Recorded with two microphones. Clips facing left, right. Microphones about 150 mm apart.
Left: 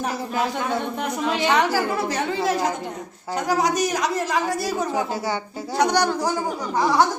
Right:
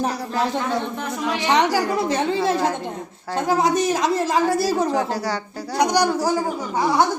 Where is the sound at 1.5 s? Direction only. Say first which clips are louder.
Right 3 dB; 20° right (ahead or behind).